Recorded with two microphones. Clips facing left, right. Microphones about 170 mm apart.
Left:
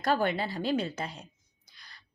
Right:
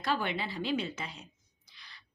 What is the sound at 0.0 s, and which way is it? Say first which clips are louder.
A woman's voice: left 5 dB; 45° left (ahead or behind).